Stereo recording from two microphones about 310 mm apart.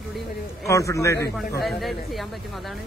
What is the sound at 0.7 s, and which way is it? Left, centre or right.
A man's voice, centre.